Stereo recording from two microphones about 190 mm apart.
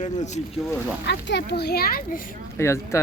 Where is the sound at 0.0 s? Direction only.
40° left (ahead or behind).